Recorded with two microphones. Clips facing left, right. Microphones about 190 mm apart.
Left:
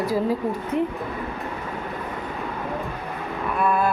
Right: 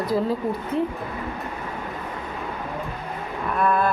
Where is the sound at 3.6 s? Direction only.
10° left (ahead or behind).